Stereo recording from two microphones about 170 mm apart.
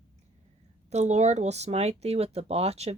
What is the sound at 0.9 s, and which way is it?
Speech, 40° right (ahead or behind).